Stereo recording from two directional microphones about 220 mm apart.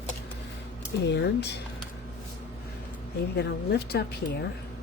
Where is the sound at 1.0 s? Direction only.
50° left (ahead or behind).